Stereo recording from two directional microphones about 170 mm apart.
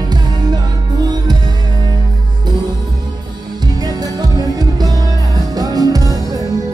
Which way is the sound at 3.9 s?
20° right (ahead or behind).